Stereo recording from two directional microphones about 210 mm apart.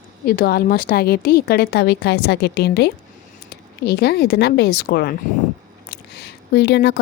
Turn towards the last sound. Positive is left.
turn(degrees=50)  # may be behind; listen again after turning